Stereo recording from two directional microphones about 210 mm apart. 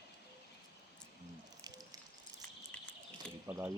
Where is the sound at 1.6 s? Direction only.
20° right (ahead or behind).